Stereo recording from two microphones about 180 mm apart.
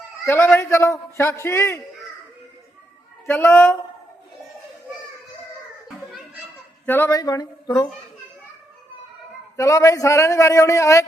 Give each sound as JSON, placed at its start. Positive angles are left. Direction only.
{"t": 0.3, "sound": "speech", "side_deg": 15}
{"t": 3.2, "sound": "speech", "side_deg": 15}
{"t": 6.8, "sound": "speech", "side_deg": 10}
{"t": 9.6, "sound": "speech", "side_deg": 20}